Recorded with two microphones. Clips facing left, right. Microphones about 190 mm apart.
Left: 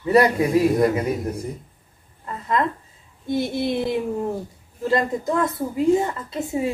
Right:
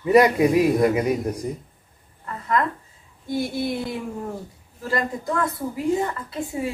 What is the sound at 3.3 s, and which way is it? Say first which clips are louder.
Speech: left 2 dB; 20° left (ahead or behind).